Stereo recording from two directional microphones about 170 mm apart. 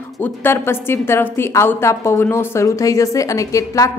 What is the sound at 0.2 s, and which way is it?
A woman's voice, 15° left (ahead or behind).